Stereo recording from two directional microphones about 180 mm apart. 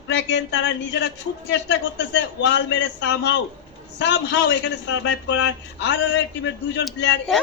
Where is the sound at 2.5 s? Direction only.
85° left.